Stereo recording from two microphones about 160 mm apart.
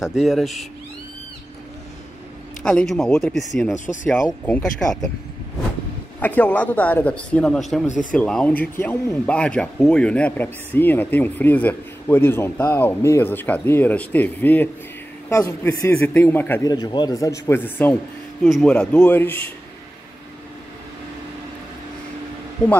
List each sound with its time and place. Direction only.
0.0 s speech: centre (ahead or behind)
2.6 s speech: 5° left (ahead or behind)
3.7 s speech: 50° left (ahead or behind)
4.3 s speech: 10° left (ahead or behind)
6.1 s speech: 10° left (ahead or behind)
16.6 s a man's voice: 25° left (ahead or behind)